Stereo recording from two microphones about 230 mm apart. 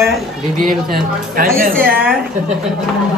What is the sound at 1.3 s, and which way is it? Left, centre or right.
Speech, right.